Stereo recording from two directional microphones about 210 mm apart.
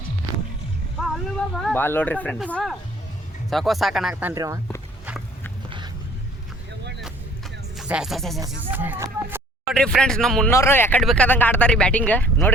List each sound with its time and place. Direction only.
1.0 s a sound: centre (ahead or behind)
1.6 s speech: 10° left (ahead or behind); by 4.6 s 15° right (ahead or behind)
7.8 s speech: 5° right (ahead or behind)
9.7 s speech: 5° left (ahead or behind)
10.5 s speech: 10° left (ahead or behind)